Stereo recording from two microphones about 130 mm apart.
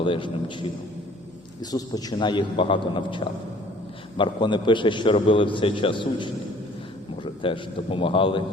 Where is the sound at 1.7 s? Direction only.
30° left (ahead or behind).